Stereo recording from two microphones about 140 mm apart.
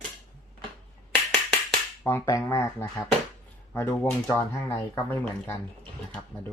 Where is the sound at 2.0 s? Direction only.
20° left (ahead or behind).